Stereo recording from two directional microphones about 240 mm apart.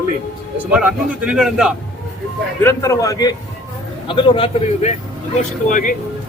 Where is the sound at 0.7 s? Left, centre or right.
Centre.